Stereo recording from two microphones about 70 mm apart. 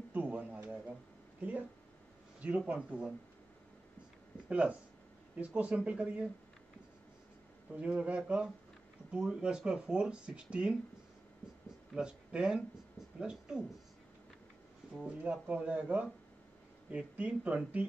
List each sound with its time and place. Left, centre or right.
0.1 s a sound: right
2.4 s speech: centre
4.5 s speech: centre
7.7 s speech: centre
11.9 s speech: centre
15.0 s speech: centre